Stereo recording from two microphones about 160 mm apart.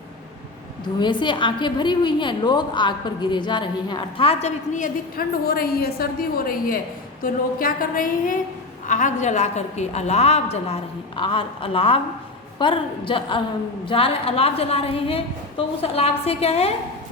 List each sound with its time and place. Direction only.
0.9 s a woman's voice: 30° left (ahead or behind)